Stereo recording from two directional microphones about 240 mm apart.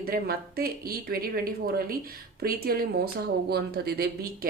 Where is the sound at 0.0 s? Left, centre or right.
Right.